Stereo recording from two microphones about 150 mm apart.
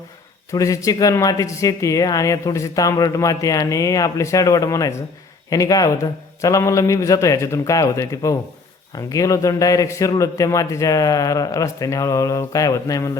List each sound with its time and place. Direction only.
0.5 s speech: 20° left (ahead or behind)